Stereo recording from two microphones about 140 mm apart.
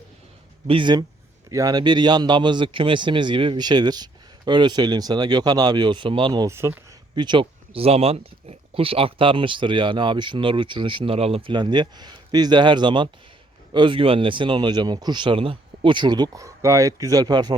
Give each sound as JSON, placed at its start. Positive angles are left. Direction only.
{"t": 0.7, "sound": "speech", "side_deg": -35}
{"t": 6.5, "sound": "speech", "side_deg": -20}
{"t": 7.2, "sound": "speech", "side_deg": -35}